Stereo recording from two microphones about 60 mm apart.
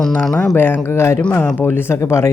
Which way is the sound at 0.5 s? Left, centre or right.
Left.